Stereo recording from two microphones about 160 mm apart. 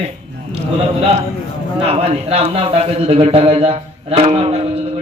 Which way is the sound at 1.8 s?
40° right (ahead or behind).